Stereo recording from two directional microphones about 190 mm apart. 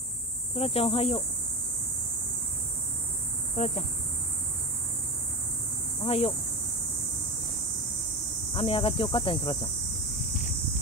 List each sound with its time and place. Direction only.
0.6 s speech: 30° left (ahead or behind)
3.5 s speech: 35° left (ahead or behind)
6.0 s speech: 30° left (ahead or behind)
8.5 s speech: 30° left (ahead or behind)